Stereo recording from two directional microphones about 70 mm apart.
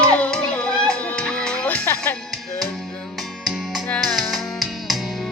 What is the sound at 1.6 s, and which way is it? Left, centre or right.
Music, left.